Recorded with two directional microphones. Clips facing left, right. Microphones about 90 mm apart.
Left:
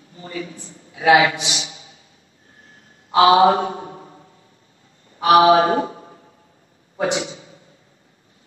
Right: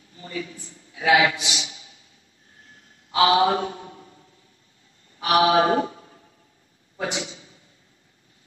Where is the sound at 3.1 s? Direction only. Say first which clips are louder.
Left 6 dB; 40° left (ahead or behind).